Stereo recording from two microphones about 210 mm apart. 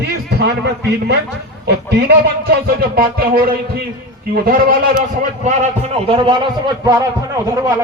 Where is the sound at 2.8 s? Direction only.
45° right (ahead or behind).